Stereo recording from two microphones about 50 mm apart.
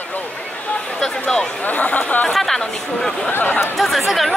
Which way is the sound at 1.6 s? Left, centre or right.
Left.